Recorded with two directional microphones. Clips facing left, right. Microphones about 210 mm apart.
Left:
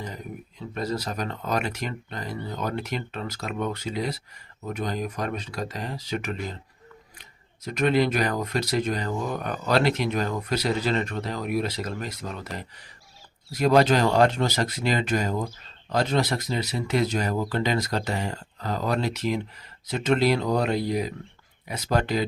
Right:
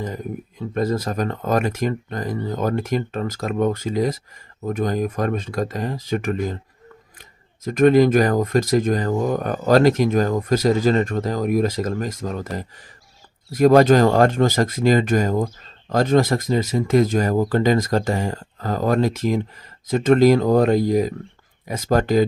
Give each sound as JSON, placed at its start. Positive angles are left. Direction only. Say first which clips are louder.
{"t": 0.7, "sound": "speech", "louder": "right 7 dB", "side_deg": -50}